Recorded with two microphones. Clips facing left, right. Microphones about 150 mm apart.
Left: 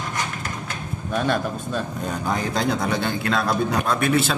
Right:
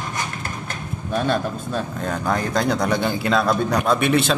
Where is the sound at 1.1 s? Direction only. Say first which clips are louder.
Right 1 dB; 30° right (ahead or behind).